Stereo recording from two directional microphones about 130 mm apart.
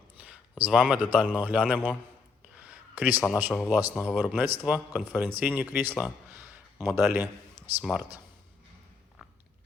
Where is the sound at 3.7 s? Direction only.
15° right (ahead or behind).